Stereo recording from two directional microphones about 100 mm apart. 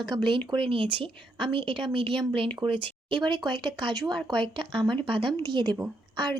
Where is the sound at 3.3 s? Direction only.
45° right (ahead or behind).